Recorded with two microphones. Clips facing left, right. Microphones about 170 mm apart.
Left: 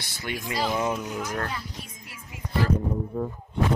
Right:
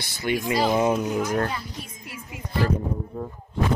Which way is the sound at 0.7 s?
25° right (ahead or behind).